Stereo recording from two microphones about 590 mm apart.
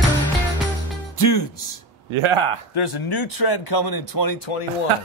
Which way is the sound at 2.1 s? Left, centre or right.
Right.